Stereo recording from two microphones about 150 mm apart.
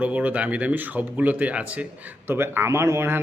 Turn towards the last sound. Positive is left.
turn(degrees=-15)  # may be behind; listen again after turning